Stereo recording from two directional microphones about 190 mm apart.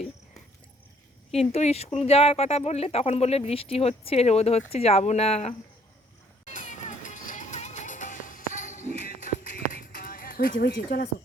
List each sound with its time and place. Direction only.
1.3 s speech: 30° left (ahead or behind)
6.4 s music: 40° left (ahead or behind); by 11.0 s 55° left (ahead or behind)